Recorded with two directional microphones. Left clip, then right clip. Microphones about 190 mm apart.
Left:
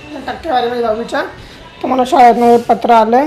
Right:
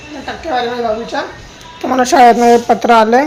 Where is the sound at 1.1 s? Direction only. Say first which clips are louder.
Left 2 dB; 25° left (ahead or behind).